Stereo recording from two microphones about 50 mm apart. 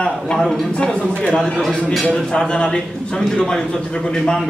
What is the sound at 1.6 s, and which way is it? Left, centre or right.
Speech, centre.